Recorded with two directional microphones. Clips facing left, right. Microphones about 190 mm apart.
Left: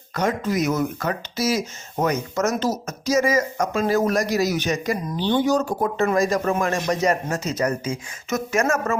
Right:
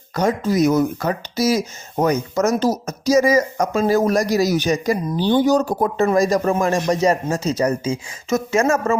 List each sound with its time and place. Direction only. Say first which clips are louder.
0.1 s speech: right 4 dB; 35° right (ahead or behind)